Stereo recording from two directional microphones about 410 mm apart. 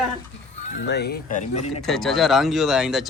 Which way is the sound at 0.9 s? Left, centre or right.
Left.